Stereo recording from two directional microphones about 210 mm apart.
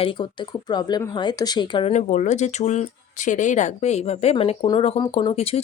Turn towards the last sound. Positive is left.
turn(degrees=30)  # may be behind; listen again after turning